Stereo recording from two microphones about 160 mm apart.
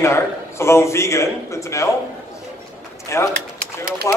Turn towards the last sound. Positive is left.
turn(degrees=20)  # may be behind; listen again after turning